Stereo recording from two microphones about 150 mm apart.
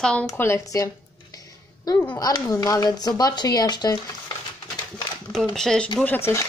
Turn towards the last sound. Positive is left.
turn(degrees=15)  # may be behind; listen again after turning